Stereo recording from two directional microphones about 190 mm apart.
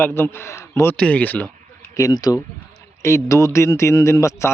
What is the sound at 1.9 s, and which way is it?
A man's voice, 20° left (ahead or behind).